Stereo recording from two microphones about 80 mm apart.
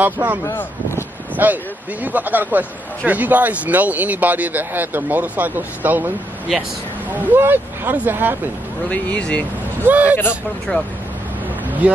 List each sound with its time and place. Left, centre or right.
0.0 s speech: right
0.5 s speech: left
1.3 s speech: right
7.2 s speech: right
8.8 s speech: centre
9.8 s speech: centre
10.7 s speech: centre